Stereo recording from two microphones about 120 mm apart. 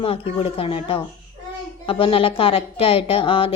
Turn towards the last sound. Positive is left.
turn(degrees=50)  # may be behind; listen again after turning